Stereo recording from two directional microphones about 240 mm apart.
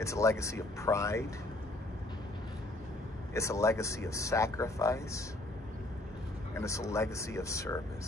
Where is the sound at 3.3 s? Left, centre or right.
Centre.